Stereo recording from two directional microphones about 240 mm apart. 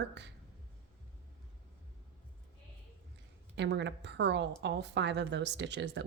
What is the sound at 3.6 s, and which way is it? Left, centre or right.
Speech, right.